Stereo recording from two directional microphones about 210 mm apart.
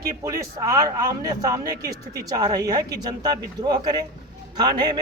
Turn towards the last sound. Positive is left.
turn(degrees=-20)  # may be behind; listen again after turning